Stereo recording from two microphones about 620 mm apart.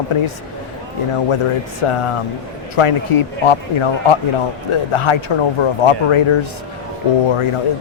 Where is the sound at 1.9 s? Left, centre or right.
Left.